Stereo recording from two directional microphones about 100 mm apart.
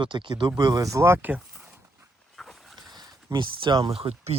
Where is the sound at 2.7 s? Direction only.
40° right (ahead or behind).